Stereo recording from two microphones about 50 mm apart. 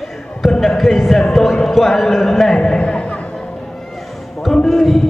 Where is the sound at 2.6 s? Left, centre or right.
Centre.